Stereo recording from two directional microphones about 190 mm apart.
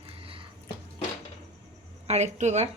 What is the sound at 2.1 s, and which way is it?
Speech, 35° right (ahead or behind).